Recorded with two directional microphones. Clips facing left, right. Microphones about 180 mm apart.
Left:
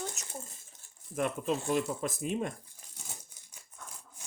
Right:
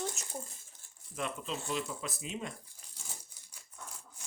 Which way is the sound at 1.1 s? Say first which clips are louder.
Left 7 dB; 50° left (ahead or behind).